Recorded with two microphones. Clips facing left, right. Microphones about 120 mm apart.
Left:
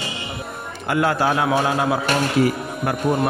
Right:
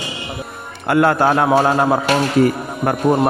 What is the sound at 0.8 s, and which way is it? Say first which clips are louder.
Speech: right 5 dB; 55° right (ahead or behind).